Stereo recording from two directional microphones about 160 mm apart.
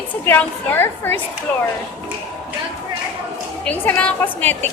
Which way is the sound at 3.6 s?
10° left (ahead or behind).